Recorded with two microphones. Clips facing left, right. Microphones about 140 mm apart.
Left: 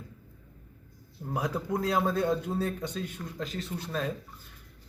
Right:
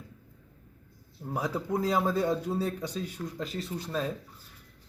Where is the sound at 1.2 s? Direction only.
Centre (ahead or behind).